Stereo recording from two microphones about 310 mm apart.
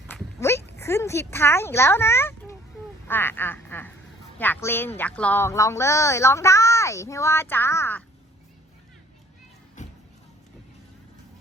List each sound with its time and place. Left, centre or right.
0.1 s a sound: centre
3.1 s speech: centre
9.8 s music: left